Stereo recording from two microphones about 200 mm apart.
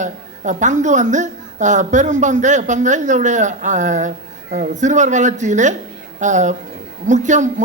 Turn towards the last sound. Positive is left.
turn(degrees=-35)  # may be behind; listen again after turning